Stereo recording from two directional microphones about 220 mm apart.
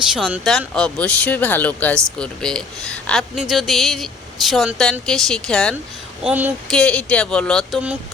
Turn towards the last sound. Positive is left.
turn(degrees=0)  # may be behind; listen again after turning